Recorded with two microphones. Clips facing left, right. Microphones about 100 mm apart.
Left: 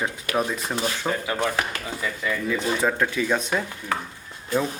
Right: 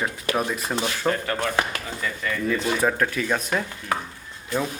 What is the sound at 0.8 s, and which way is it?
Speech, 5° left (ahead or behind).